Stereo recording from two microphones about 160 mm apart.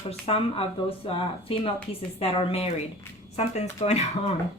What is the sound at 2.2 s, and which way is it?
A woman's voice, 35° left (ahead or behind).